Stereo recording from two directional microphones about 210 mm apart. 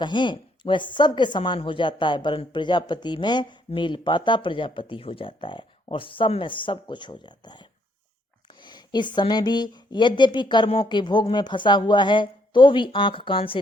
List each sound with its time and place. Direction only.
0.0 s speech: 20° left (ahead or behind)